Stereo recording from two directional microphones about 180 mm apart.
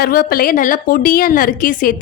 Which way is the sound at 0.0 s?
55° left (ahead or behind).